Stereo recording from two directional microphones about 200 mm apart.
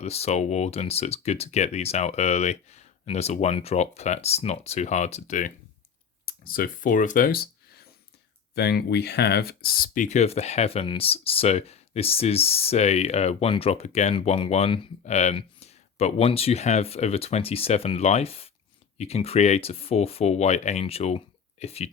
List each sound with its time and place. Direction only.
0.0 s speech: 30° left (ahead or behind)
6.2 s speech: 45° left (ahead or behind); by 21.8 s 30° left (ahead or behind)